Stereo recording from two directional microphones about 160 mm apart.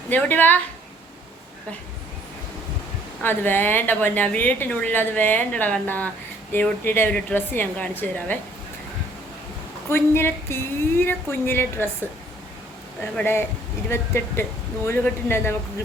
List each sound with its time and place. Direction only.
0.1 s a woman's voice: 10° left (ahead or behind)
3.2 s a woman's voice: 10° left (ahead or behind)
9.9 s a woman's voice: 15° left (ahead or behind)
13.1 s a woman's voice: 15° left (ahead or behind)